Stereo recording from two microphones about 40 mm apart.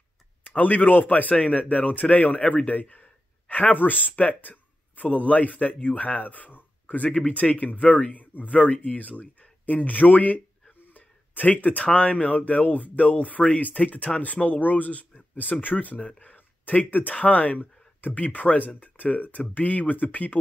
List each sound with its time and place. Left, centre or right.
0.5 s speech: left
1.3 s speech: left
7.1 s speech: left
7.3 s speech: left
16.3 s a sound: left
17.1 s speech: left